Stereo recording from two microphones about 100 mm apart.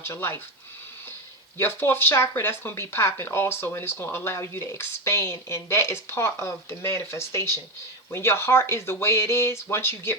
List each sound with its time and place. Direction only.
0.0 s speech: 25° left (ahead or behind)
1.5 s speech: 20° left (ahead or behind)